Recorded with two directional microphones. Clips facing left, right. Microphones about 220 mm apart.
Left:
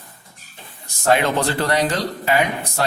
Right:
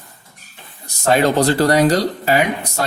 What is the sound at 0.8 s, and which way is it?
Speech, 40° right (ahead or behind).